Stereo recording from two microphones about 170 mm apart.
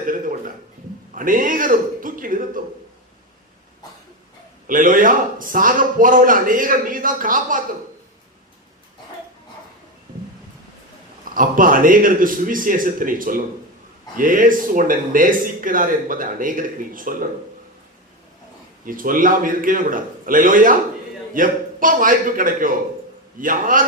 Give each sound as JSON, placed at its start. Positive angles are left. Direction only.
{"t": 0.0, "sound": "a sound", "side_deg": -55}
{"t": 1.1, "sound": "a man's voice", "side_deg": -55}
{"t": 4.6, "sound": "a man's voice", "side_deg": -55}
{"t": 11.3, "sound": "a man's voice", "side_deg": -55}
{"t": 18.9, "sound": "a man's voice", "side_deg": -55}